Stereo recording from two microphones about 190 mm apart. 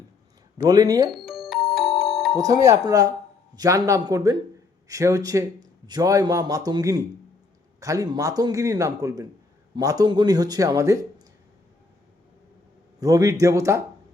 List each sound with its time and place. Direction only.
0.6 s speech: 20° right (ahead or behind)
1.1 s music: centre (ahead or behind)
2.3 s a man's voice: 20° right (ahead or behind)
13.0 s a man's voice: 15° right (ahead or behind)